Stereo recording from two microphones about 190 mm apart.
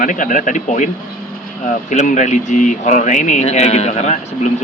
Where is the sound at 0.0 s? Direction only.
45° left (ahead or behind).